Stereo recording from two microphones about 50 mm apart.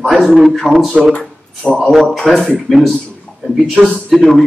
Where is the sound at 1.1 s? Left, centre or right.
Left.